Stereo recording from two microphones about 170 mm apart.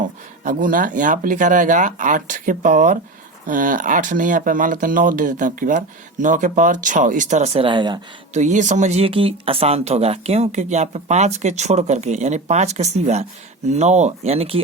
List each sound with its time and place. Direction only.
0.4 s speech: 50° right (ahead or behind); by 7.9 s 25° right (ahead or behind)
8.3 s speech: 45° right (ahead or behind)